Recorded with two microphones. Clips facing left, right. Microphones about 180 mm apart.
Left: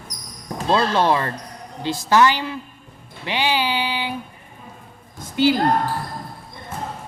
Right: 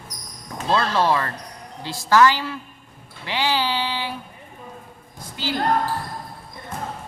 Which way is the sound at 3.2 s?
15° left (ahead or behind).